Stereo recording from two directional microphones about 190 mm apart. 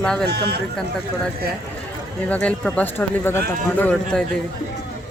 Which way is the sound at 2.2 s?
5° left (ahead or behind).